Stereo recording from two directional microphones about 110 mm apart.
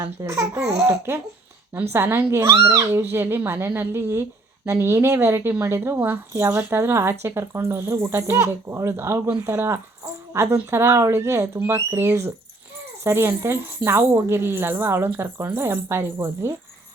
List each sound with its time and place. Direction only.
0.0 s speech: 25° right (ahead or behind)